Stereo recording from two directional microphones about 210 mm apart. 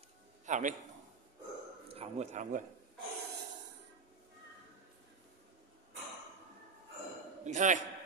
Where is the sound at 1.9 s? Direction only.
30° right (ahead or behind).